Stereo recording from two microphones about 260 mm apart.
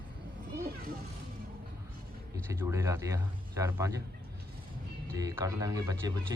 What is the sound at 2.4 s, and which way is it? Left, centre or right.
A man's voice, centre.